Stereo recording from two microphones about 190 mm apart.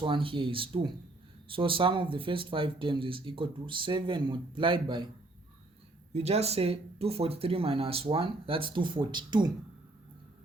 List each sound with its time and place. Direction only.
0.0 s speech: 25° right (ahead or behind)
6.1 s speech: 35° right (ahead or behind)